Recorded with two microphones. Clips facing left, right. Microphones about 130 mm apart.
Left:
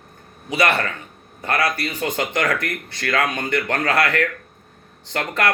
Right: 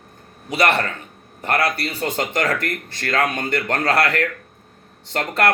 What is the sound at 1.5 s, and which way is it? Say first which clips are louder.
Speech: right 1 dB; 30° right (ahead or behind).